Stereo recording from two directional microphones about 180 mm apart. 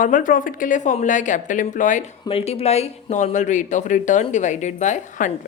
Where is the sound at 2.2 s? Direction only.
35° left (ahead or behind).